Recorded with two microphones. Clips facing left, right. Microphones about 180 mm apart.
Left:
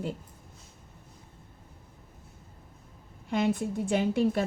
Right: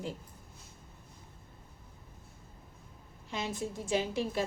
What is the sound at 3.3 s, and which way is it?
A woman's voice, 60° left (ahead or behind).